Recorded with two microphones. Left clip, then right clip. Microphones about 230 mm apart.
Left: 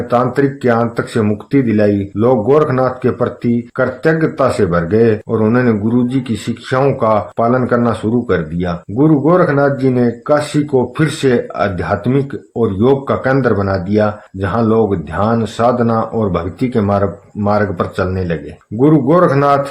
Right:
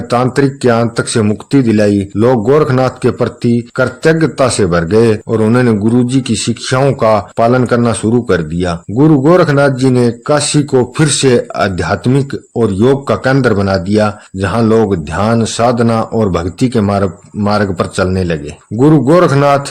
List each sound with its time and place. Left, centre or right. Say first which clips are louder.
0.1 s speech: right 2 dB; right